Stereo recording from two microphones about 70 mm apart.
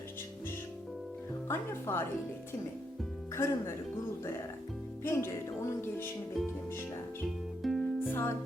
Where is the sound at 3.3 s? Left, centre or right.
Left.